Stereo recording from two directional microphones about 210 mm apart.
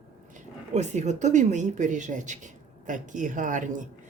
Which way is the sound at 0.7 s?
35° right (ahead or behind).